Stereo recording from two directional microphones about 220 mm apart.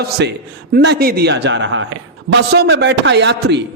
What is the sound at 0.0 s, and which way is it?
A man's voice, 45° right (ahead or behind).